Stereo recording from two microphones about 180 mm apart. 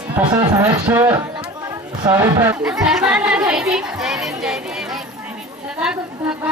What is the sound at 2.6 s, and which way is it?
A woman's voice, 5° right (ahead or behind).